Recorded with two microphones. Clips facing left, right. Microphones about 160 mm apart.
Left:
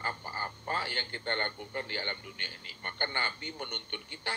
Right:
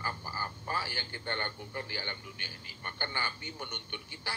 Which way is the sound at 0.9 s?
55° left (ahead or behind).